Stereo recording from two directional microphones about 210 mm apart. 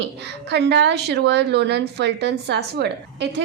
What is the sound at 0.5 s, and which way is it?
A woman's voice, 55° right (ahead or behind).